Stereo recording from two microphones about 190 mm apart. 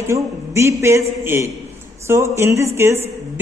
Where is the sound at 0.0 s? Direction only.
15° right (ahead or behind).